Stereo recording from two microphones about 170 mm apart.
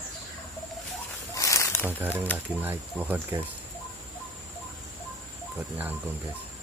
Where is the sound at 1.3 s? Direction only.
20° left (ahead or behind).